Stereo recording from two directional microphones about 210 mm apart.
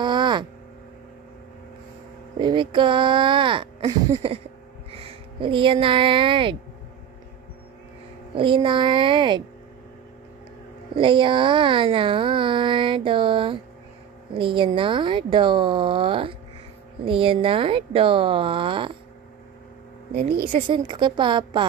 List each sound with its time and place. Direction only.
0.0 s a sound: 20° right (ahead or behind)
2.3 s speech: 25° right (ahead or behind)
8.4 s speech: 25° right (ahead or behind)
11.0 s speech: 25° right (ahead or behind)
20.2 s a woman's voice: 45° right (ahead or behind)
20.5 s speech: 20° right (ahead or behind)